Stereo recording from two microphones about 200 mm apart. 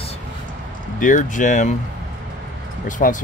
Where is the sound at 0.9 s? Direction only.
40° left (ahead or behind).